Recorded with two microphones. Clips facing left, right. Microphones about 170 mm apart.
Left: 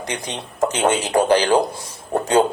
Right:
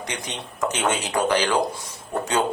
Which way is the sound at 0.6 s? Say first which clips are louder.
Left 6 dB; 30° left (ahead or behind).